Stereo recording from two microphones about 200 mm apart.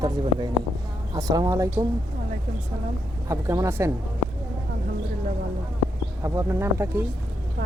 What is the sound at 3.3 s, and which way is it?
Speech, 15° right (ahead or behind).